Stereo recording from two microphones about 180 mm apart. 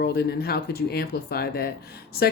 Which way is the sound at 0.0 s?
60° left (ahead or behind).